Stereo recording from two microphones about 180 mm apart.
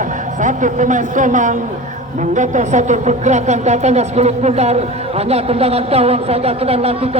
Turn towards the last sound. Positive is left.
turn(degrees=-35)  # may be behind; listen again after turning